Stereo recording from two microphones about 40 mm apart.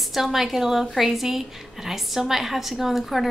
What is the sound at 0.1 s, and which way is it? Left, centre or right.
A woman's voice, centre.